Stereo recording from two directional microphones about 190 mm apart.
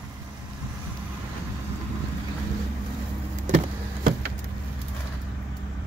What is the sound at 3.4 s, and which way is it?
Vehicle, 40° right (ahead or behind).